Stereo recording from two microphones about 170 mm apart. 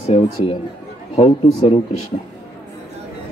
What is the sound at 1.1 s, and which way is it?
Speech, 35° left (ahead or behind).